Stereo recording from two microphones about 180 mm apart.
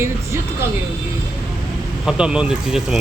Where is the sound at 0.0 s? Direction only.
15° right (ahead or behind).